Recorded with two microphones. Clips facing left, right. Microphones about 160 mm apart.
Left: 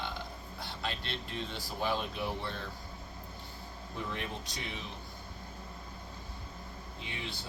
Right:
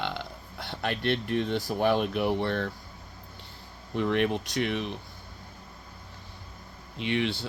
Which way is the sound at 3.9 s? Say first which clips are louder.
Right 13 dB; 70° right (ahead or behind).